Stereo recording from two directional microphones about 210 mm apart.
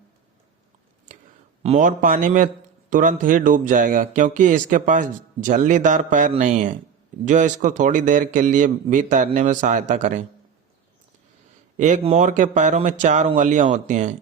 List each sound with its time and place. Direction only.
1.1 s a sound: 40° right (ahead or behind)
1.6 s speech: 35° right (ahead or behind)
11.8 s speech: 35° right (ahead or behind)